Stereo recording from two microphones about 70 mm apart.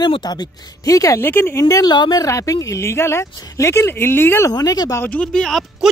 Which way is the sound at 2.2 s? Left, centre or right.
Left.